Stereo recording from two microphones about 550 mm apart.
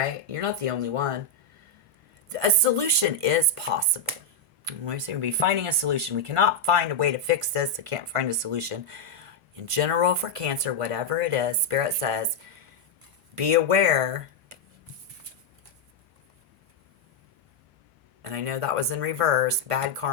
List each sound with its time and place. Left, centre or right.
0.0 s speech: right
2.3 s speech: right
13.3 s speech: right
18.2 s speech: right